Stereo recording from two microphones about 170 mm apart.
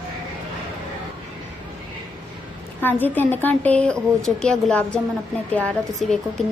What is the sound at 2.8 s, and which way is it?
A woman's voice, 10° left (ahead or behind).